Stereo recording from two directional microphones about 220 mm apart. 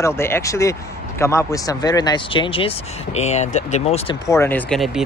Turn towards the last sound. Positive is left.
turn(degrees=5)  # may be behind; listen again after turning